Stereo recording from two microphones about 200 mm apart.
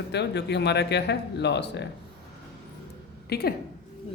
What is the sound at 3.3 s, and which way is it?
Speech, 55° left (ahead or behind).